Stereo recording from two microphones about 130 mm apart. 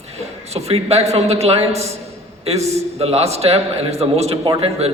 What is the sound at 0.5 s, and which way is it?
A man's voice, 55° right (ahead or behind).